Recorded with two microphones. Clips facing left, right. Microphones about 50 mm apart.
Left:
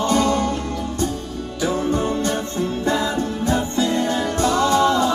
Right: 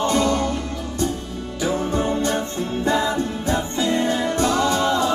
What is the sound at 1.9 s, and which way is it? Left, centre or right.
Music, centre.